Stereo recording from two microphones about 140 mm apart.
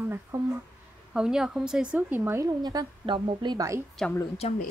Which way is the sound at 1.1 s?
5° right (ahead or behind).